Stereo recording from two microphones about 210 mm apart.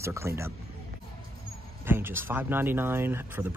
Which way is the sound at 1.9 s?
10° right (ahead or behind).